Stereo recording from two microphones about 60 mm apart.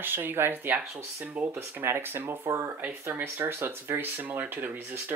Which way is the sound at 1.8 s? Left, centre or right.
Right.